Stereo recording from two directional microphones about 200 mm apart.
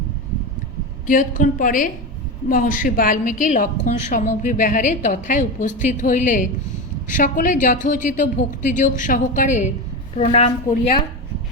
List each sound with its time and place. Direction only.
1.0 s a woman's voice: 40° left (ahead or behind)